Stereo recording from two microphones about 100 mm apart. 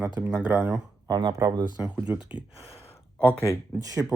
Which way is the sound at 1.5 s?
50° right (ahead or behind).